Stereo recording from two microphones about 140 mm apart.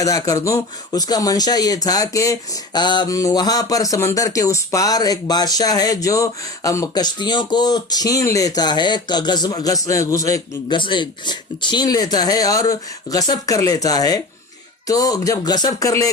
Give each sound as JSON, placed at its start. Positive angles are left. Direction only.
{"t": 0.0, "sound": "speech", "side_deg": 25}
{"t": 10.8, "sound": "speech", "side_deg": 35}